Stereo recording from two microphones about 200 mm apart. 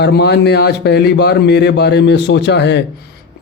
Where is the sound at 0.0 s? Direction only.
55° left (ahead or behind).